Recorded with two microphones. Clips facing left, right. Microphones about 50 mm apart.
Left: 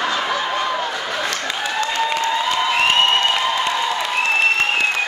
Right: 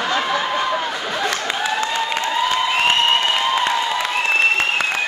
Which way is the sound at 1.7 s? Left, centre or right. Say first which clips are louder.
Left 4 dB; centre.